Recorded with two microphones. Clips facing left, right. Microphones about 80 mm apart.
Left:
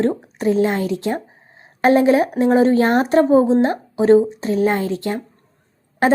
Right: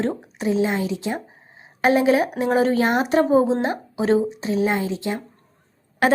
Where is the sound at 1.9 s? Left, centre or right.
Left.